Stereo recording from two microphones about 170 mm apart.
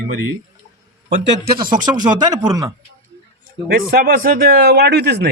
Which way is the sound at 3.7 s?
60° right (ahead or behind).